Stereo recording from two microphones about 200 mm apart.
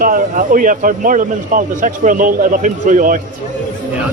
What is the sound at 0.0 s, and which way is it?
A man's voice, 45° right (ahead or behind).